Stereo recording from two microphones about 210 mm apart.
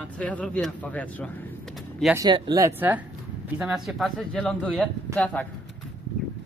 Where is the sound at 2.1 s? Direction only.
20° right (ahead or behind); by 5.5 s 5° left (ahead or behind).